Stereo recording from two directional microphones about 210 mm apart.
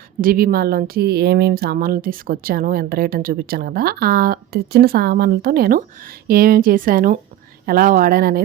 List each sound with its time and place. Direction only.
0.2 s speech: 45° right (ahead or behind)